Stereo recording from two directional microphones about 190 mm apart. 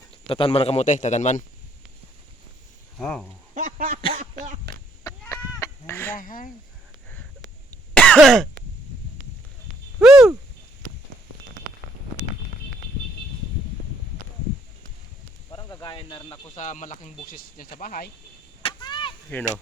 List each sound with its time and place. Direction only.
0.3 s a man's voice: 30° left (ahead or behind)
3.0 s speech: 5° left (ahead or behind)
3.5 s speech: 40° right (ahead or behind)
4.1 s a sound: 40° right (ahead or behind)
4.6 s a sound: 15° left (ahead or behind)
6.1 s speech: 45° left (ahead or behind)
7.7 s throat clearing: 5° left (ahead or behind)
10.0 s a sound: centre (ahead or behind)
15.4 s snake: 20° left (ahead or behind)
16.6 s speech: 40° left (ahead or behind)
18.6 s a sound: 25° left (ahead or behind)
19.3 s speech: 10° left (ahead or behind)